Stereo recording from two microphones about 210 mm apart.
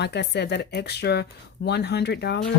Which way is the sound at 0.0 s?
55° left (ahead or behind).